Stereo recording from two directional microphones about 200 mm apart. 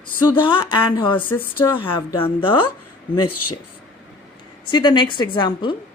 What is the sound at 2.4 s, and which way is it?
Speech, 25° left (ahead or behind).